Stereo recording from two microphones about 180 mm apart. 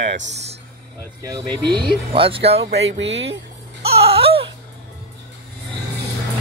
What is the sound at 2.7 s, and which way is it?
Speech, 80° right.